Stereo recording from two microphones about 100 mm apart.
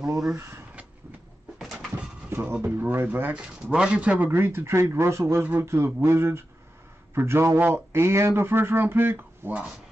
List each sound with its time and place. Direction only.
1.6 s cupboard open or close: 5° right (ahead or behind)
2.2 s a sound: 20° right (ahead or behind)
2.6 s a man's voice: 20° right (ahead or behind)